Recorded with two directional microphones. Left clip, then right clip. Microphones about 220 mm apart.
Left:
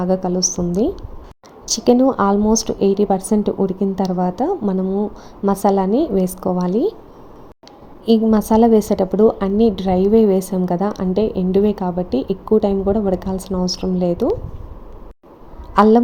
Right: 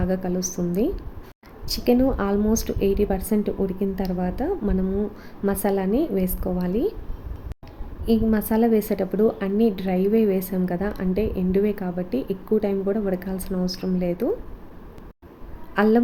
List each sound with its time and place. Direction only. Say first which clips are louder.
0.0 s a woman's voice: left 8 dB; 15° left (ahead or behind)
8.0 s a woman's voice: left 7 dB; 20° left (ahead or behind)
15.7 s a woman's voice: left 8 dB; 15° left (ahead or behind)